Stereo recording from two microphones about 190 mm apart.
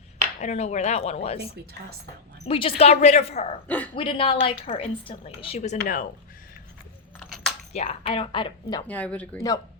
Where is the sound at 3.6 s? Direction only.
10° left (ahead or behind).